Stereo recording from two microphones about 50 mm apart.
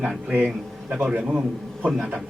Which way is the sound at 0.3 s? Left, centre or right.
Right.